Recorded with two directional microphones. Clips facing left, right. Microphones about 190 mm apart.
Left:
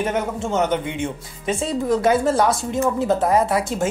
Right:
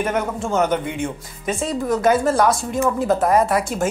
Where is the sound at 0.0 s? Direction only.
25° left (ahead or behind).